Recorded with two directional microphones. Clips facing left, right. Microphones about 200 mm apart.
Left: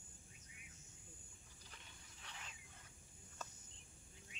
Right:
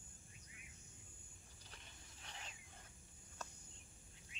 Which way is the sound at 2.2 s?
35° right (ahead or behind).